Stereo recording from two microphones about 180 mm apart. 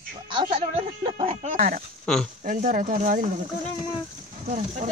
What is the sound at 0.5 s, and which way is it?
Speech, 35° right (ahead or behind).